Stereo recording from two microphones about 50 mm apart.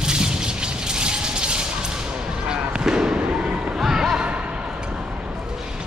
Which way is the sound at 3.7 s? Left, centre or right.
Centre.